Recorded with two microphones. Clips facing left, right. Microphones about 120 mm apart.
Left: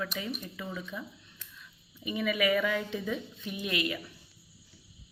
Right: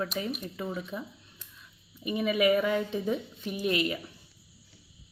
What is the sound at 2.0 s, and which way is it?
A woman's voice, 30° right (ahead or behind).